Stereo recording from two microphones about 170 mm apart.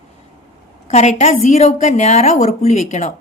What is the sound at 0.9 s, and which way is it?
A woman's voice, 45° left (ahead or behind).